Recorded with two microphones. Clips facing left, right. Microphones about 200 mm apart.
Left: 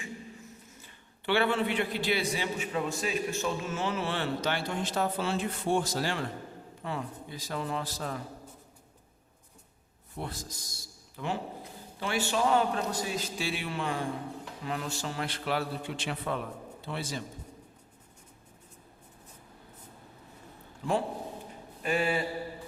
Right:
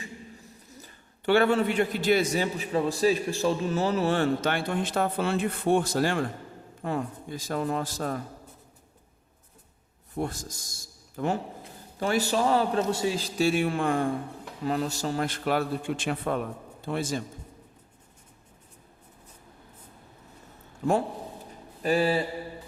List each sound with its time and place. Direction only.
0.7 s a man's voice: 40° right (ahead or behind)
10.2 s a man's voice: 45° right (ahead or behind)
14.6 s a man's voice: 40° right (ahead or behind)
20.8 s a man's voice: 45° right (ahead or behind)
21.8 s a man's voice: 35° right (ahead or behind)